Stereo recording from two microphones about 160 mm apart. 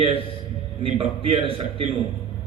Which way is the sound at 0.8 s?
35° right (ahead or behind).